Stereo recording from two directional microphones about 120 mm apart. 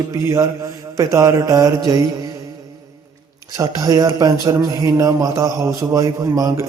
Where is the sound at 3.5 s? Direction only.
30° right (ahead or behind).